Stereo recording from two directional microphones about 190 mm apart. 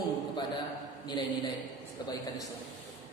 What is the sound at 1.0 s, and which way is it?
Speech, 25° left (ahead or behind).